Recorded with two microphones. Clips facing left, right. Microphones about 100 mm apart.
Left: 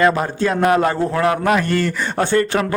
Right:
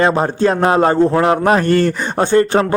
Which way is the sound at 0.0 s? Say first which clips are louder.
Right 3 dB; 30° right (ahead or behind).